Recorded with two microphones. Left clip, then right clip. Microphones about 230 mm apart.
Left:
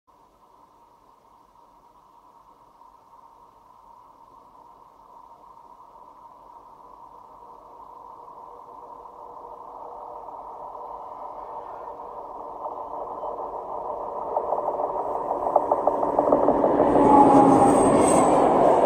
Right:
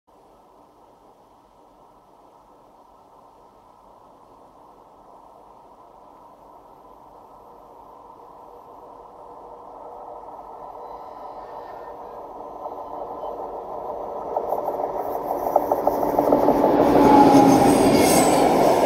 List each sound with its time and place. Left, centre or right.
12.6 s vehicle: right
16.4 s train: centre
17.0 s train: right